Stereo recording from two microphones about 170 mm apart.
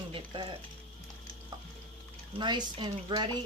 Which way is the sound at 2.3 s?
25° right (ahead or behind).